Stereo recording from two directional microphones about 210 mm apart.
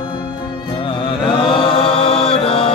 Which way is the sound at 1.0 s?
25° left (ahead or behind).